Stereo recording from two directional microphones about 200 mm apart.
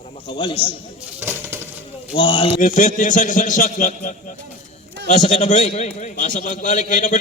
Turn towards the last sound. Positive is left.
turn(degrees=40)  # may be behind; listen again after turning